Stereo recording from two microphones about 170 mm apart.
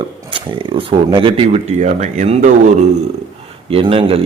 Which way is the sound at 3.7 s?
35° right (ahead or behind).